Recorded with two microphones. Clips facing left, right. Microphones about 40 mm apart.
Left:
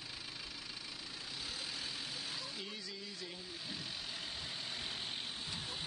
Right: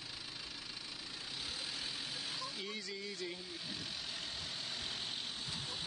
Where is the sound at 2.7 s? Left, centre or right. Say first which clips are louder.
Right 3 dB; right.